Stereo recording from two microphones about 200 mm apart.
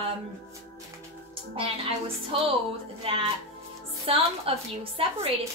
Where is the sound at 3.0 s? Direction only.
30° right (ahead or behind).